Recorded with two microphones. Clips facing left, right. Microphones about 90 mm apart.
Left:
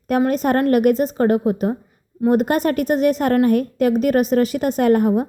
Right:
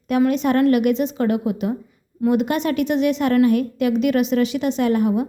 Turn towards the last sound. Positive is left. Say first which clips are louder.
# left 3 dB
turn(degrees=45)  # may be behind; listen again after turning